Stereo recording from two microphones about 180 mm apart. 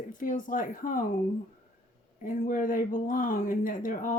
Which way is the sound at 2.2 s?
45° left (ahead or behind).